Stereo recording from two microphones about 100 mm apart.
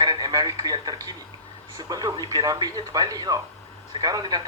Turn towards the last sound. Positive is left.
turn(degrees=-40)  # may be behind; listen again after turning